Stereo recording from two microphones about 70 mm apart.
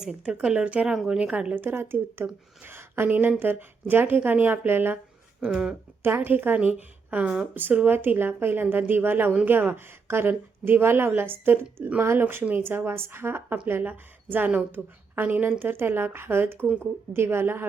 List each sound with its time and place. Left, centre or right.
0.0 s speech: centre
1.6 s speech: right
6.0 s speech: right
14.8 s a woman's voice: centre
15.1 s speech: right